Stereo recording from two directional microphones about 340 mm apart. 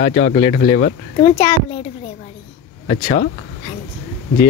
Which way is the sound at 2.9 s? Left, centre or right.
Left.